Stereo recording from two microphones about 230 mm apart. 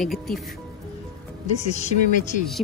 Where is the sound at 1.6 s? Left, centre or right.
Left.